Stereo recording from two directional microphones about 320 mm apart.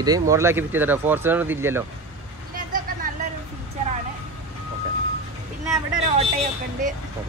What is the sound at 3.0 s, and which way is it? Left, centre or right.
Vehicle, right.